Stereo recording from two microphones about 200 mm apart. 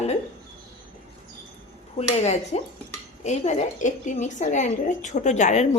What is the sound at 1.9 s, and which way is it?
A woman's voice, 35° left (ahead or behind).